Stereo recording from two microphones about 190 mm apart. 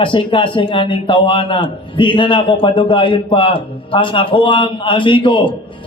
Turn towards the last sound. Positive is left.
turn(degrees=25)  # may be behind; listen again after turning